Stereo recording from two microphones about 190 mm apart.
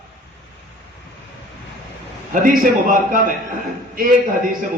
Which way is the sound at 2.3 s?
45° right (ahead or behind).